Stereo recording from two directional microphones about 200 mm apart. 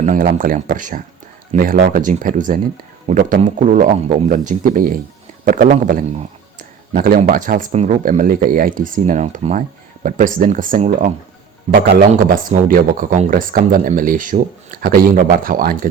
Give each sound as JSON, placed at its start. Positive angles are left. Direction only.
{"t": 0.0, "sound": "speech", "side_deg": -35}